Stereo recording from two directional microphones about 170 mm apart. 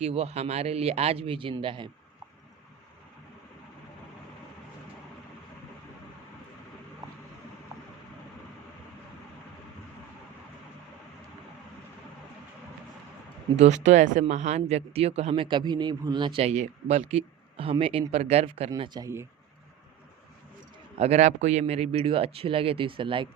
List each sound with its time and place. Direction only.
0.0 s speech: 35° right (ahead or behind)
13.6 s speech: 45° right (ahead or behind)
18.8 s speech: 20° right (ahead or behind)
21.0 s speech: 40° right (ahead or behind)